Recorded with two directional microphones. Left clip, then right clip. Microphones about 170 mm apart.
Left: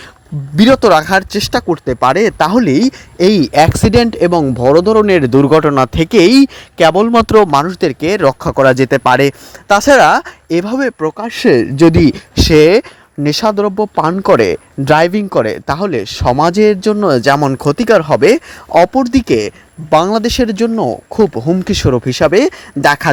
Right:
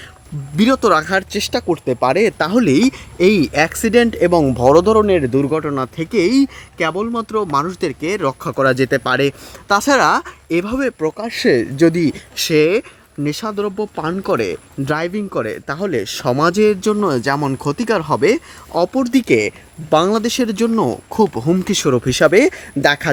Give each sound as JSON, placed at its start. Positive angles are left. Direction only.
{"t": 0.5, "sound": "speech", "side_deg": 35}
{"t": 5.0, "sound": "speech", "side_deg": 55}
{"t": 11.4, "sound": "speech", "side_deg": 50}
{"t": 18.9, "sound": "speech", "side_deg": 25}
{"t": 20.7, "sound": "speech", "side_deg": 10}
{"t": 21.3, "sound": "speech", "side_deg": 20}
{"t": 22.9, "sound": "speech", "side_deg": 45}